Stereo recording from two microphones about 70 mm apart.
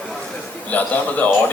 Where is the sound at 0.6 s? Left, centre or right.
Left.